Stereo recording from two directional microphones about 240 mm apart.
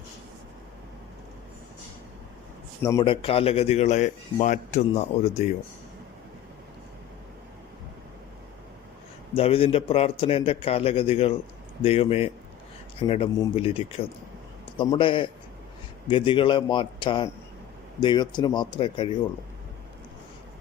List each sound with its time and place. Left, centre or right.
2.8 s speech: centre
9.3 s speech: left